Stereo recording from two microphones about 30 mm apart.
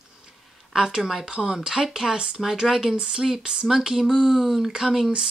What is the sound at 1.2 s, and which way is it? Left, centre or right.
Speech, right.